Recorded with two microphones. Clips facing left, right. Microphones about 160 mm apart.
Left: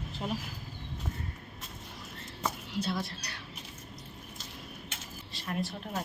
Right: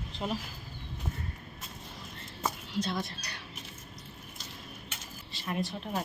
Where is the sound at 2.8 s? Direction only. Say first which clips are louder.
Right 1 dB; 5° left (ahead or behind).